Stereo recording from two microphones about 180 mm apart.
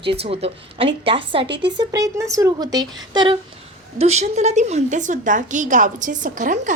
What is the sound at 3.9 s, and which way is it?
A woman's voice, 35° right (ahead or behind).